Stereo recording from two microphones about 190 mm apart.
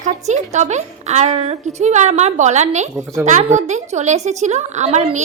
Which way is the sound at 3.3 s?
40° right (ahead or behind).